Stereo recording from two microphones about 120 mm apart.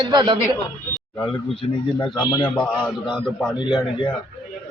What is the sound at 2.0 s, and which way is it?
Speech, 10° left (ahead or behind).